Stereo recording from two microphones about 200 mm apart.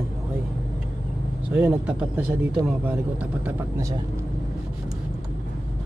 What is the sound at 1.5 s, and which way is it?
Speech, 5° right (ahead or behind).